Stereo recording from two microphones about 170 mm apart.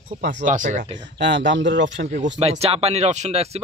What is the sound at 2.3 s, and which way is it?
Speech, 40° right (ahead or behind).